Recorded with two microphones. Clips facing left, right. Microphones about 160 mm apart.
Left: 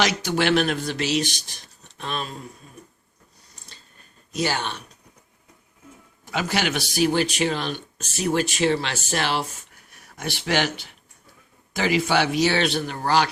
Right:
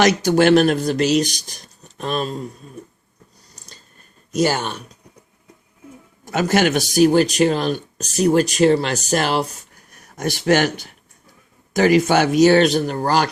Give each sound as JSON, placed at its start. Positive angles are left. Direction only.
{"t": 0.0, "sound": "speech", "side_deg": -45}
{"t": 4.3, "sound": "speech", "side_deg": -45}
{"t": 6.2, "sound": "speech", "side_deg": -45}